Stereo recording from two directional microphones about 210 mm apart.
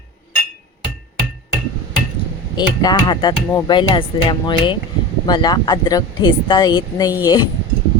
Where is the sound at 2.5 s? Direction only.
20° left (ahead or behind).